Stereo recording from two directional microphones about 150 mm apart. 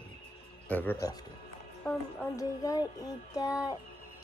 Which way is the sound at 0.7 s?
10° left (ahead or behind).